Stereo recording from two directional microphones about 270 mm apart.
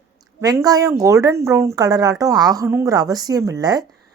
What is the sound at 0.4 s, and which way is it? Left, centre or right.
Speech, centre.